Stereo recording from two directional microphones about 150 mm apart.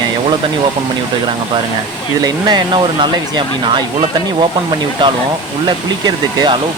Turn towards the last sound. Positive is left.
turn(degrees=-30)  # may be behind; listen again after turning